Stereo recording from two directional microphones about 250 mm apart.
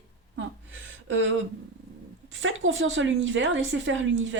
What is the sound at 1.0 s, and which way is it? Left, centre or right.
Speech, right.